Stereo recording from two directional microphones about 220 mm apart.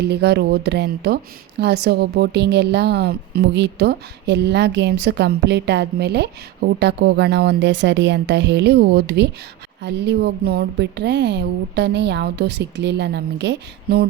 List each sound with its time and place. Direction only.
0.0 s speech: 50° right (ahead or behind)